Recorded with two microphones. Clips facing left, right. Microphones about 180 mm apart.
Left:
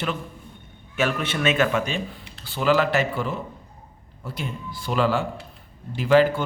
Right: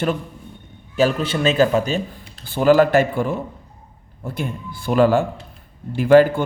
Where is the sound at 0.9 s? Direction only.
30° right (ahead or behind).